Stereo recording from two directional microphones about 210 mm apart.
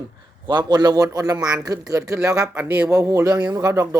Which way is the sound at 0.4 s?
20° right (ahead or behind).